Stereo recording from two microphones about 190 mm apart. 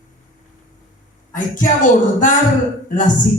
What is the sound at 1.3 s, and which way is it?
Speech, 40° left (ahead or behind).